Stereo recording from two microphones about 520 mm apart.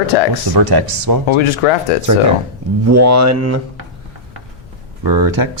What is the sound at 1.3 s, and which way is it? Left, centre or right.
Speech, left.